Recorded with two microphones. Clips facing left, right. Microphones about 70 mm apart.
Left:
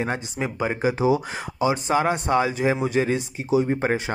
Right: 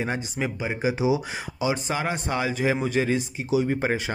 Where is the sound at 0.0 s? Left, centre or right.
Left.